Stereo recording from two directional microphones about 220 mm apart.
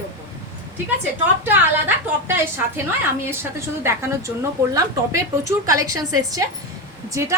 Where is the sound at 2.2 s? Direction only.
10° right (ahead or behind).